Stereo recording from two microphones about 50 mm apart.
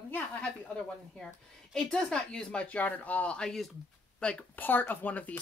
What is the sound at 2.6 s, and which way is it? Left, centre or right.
Speech, left.